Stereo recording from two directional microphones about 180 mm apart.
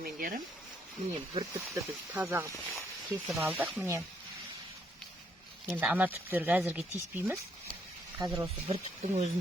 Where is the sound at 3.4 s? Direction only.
5° right (ahead or behind).